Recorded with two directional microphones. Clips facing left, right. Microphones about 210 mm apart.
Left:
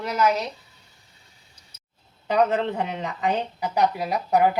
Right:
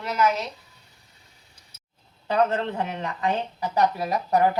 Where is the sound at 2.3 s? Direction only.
15° left (ahead or behind).